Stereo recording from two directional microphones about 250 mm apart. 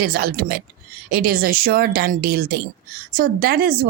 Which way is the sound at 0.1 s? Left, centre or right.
Right.